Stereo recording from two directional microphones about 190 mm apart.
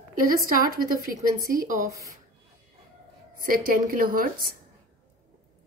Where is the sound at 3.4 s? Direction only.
45° right (ahead or behind).